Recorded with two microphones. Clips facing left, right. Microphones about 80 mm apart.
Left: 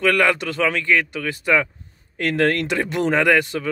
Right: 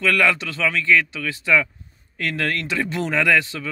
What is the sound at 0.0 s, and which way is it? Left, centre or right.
Speech, left.